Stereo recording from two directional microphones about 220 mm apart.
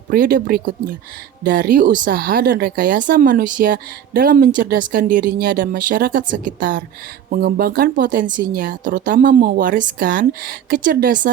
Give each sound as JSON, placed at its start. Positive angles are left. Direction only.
{"t": 0.1, "sound": "speech", "side_deg": -40}